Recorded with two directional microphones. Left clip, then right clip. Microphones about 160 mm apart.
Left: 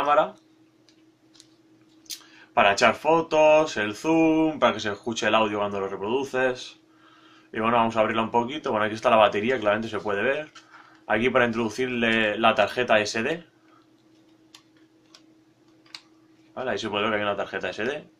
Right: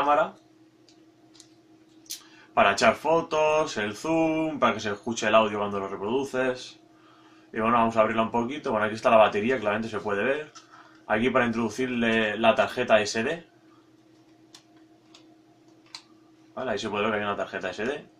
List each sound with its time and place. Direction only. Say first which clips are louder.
2.0 s speech: left 2 dB; 20° left (ahead or behind)
16.5 s speech: left 1 dB; 20° left (ahead or behind)